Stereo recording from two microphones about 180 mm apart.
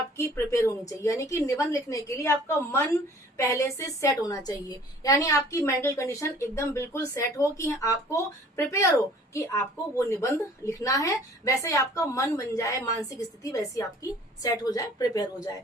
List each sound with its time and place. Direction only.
0.3 s a woman's voice: 15° left (ahead or behind)
3.3 s a woman's voice: 15° left (ahead or behind)